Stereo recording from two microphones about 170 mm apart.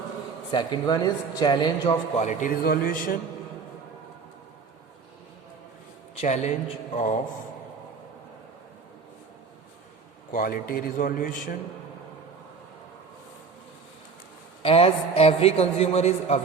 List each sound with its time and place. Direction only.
0.5 s speech: 25° left (ahead or behind)
2.1 s a man's voice: 45° left (ahead or behind)
2.6 s speech: 60° left (ahead or behind)
6.1 s a man's voice: 40° left (ahead or behind)
10.3 s speech: 55° left (ahead or behind)
14.6 s a man's voice: 35° left (ahead or behind)